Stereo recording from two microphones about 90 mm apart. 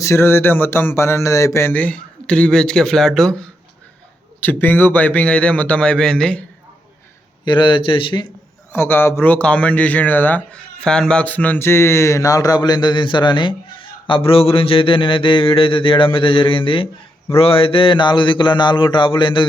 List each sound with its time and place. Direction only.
0.0 s a sound: 30° left (ahead or behind)
1.8 s a man's voice: 15° left (ahead or behind)
4.4 s a man's voice: 20° left (ahead or behind)
7.4 s speech: 60° left (ahead or behind)
8.7 s a man's voice: 25° left (ahead or behind)
10.8 s speech: 10° left (ahead or behind); by 16.9 s 75° left (ahead or behind)
17.3 s speech: 90° left; by 19.5 s 70° left (ahead or behind)